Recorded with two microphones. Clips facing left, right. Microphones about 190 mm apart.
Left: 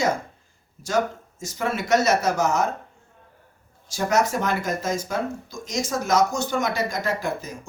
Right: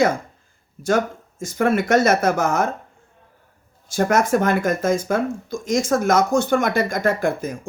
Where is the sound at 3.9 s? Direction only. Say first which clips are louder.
Right 4 dB; 55° right (ahead or behind).